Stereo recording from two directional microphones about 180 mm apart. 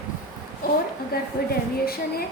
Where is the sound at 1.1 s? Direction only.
60° left (ahead or behind).